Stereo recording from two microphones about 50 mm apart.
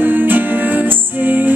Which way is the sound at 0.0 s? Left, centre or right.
Right.